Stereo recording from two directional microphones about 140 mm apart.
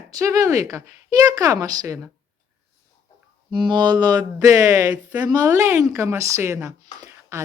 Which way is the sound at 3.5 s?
35° right (ahead or behind).